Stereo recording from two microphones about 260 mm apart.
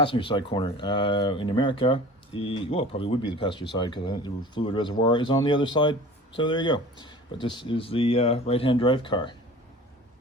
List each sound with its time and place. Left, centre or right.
0.0 s speech: centre